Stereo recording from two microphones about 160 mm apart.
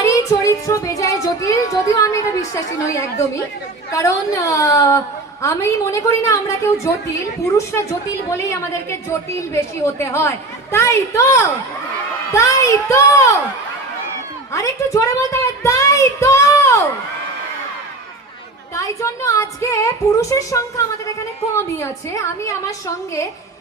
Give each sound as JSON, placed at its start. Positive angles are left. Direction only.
{"t": 0.0, "sound": "child singing", "side_deg": 20}
{"t": 3.9, "sound": "a woman's voice", "side_deg": 20}
{"t": 14.5, "sound": "a woman's voice", "side_deg": 20}
{"t": 18.7, "sound": "a woman's voice", "side_deg": 20}